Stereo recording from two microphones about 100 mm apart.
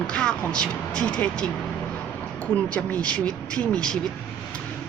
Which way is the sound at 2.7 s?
15° left (ahead or behind).